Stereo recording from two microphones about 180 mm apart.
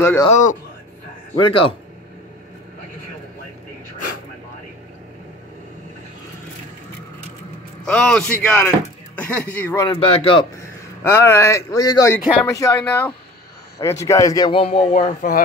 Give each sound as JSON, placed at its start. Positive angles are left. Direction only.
{"t": 0.0, "sound": "speech", "side_deg": 15}
{"t": 0.3, "sound": "a man's voice", "side_deg": 45}
{"t": 1.4, "sound": "a man's voice", "side_deg": 30}
{"t": 7.8, "sound": "speech", "side_deg": 5}
{"t": 9.8, "sound": "a man's voice", "side_deg": 30}
{"t": 11.1, "sound": "a man's voice", "side_deg": 15}